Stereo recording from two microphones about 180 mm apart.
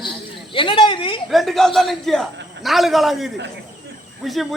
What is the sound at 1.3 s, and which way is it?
A man's voice, centre (ahead or behind).